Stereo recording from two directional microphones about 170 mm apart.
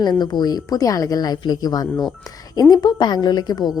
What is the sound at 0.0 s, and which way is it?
A woman's voice, 25° left (ahead or behind).